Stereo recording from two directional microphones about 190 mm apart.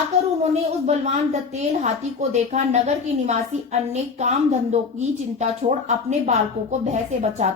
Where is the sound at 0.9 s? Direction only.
35° right (ahead or behind).